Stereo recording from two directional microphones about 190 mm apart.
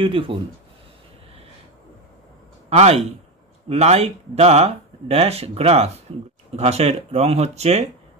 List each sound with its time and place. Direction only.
0.0 s speech: 30° right (ahead or behind)
2.7 s speech: 35° right (ahead or behind)